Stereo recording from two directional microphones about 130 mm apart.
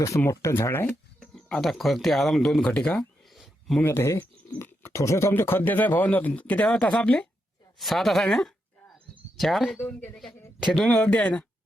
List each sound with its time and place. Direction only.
0.0 s speech: 25° left (ahead or behind)
1.2 s speech: 5° left (ahead or behind)
3.2 s a sound: centre (ahead or behind)
3.8 s speech: 20° left (ahead or behind)